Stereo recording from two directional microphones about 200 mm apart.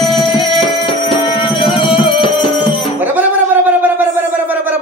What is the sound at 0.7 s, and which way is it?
Music, 25° left (ahead or behind).